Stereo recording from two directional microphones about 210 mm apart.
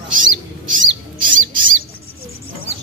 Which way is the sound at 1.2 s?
40° right (ahead or behind).